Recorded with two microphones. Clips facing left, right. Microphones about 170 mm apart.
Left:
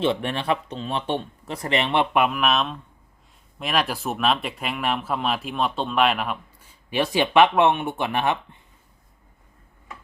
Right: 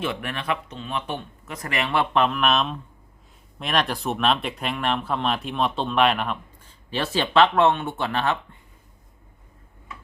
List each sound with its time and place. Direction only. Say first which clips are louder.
0.0 s speech: left 5 dB; 30° left (ahead or behind)
2.1 s speech: even; 10° left (ahead or behind)